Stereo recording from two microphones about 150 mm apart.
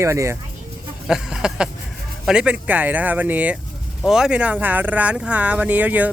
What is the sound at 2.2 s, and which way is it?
Speech, 5° right (ahead or behind).